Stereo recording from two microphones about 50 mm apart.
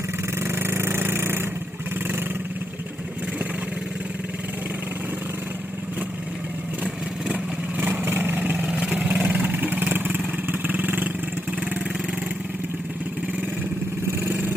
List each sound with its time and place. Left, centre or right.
0.3 s vehicle: right
6.8 s vehicle: right
8.6 s vehicle: centre
9.0 s vehicle: right
14.1 s vehicle: right